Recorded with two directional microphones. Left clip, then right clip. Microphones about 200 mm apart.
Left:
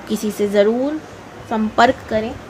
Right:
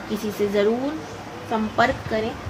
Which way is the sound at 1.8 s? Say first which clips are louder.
Left 7 dB; 55° left (ahead or behind).